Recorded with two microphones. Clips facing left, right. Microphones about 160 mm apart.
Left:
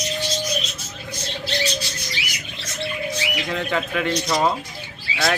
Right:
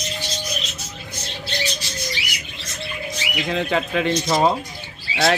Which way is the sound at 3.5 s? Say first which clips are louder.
Right 3 dB; 25° right (ahead or behind).